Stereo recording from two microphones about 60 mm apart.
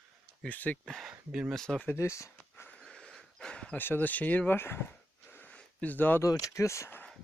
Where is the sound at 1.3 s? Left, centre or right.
Centre.